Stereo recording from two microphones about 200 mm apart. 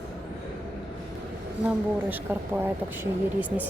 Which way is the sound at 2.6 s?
10° right (ahead or behind).